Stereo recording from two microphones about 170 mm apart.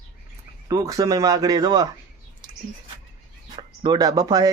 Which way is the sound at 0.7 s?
20° right (ahead or behind).